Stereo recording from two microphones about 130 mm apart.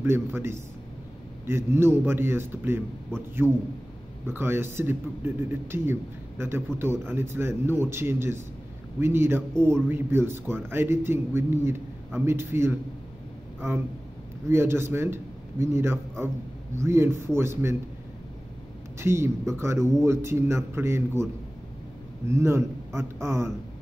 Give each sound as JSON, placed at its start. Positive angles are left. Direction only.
{"t": 0.0, "sound": "a man's voice", "side_deg": -20}
{"t": 3.4, "sound": "a man's voice", "side_deg": 10}
{"t": 4.3, "sound": "a man's voice", "side_deg": -15}
{"t": 14.5, "sound": "a man's voice", "side_deg": -20}
{"t": 18.9, "sound": "speech", "side_deg": -20}
{"t": 22.3, "sound": "a man's voice", "side_deg": -20}